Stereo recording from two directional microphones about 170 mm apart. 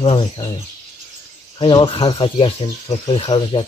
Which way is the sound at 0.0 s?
30° left (ahead or behind).